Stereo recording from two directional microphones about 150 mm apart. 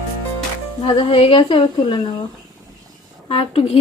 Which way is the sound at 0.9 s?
40° left (ahead or behind).